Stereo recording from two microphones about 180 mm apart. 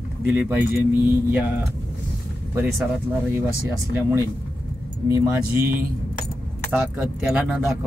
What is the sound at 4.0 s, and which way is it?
Speech, 10° right (ahead or behind).